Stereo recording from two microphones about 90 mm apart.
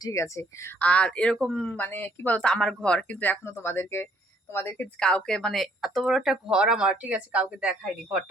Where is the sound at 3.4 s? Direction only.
30° left (ahead or behind).